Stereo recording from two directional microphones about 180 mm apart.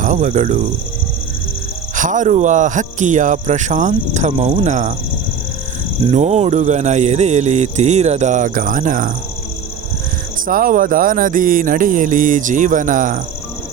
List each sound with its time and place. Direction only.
0.0 s speech: 45° right (ahead or behind)
2.0 s speech: 45° right (ahead or behind)
6.1 s speech: 40° right (ahead or behind)
10.4 s speech: 50° right (ahead or behind)